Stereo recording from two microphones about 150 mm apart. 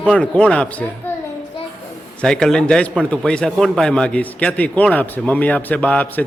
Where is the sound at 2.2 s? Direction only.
5° left (ahead or behind).